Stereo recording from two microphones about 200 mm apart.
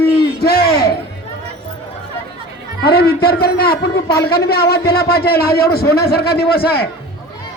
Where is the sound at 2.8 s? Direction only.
50° left (ahead or behind).